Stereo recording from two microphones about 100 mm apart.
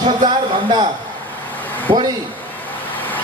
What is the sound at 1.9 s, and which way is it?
Speech, 50° right (ahead or behind).